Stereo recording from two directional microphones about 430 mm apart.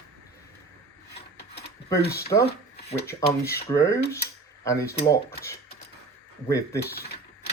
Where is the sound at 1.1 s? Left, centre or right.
Left.